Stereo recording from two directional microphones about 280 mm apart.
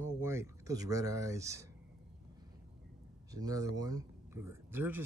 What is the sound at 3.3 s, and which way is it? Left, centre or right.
Speech, centre.